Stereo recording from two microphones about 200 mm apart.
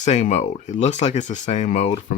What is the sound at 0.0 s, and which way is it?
Speech, 35° left (ahead or behind).